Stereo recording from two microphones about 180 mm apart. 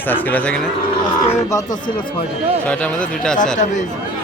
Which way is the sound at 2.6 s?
5° left (ahead or behind).